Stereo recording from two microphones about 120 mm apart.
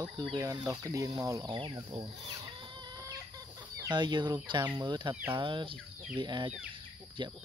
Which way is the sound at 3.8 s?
40° right (ahead or behind).